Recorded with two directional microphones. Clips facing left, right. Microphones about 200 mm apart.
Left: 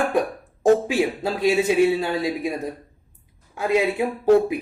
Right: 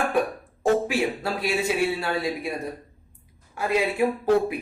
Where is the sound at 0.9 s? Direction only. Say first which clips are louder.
Left 3 dB; 20° left (ahead or behind).